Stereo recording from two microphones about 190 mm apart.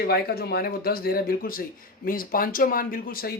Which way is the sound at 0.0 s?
55° left (ahead or behind).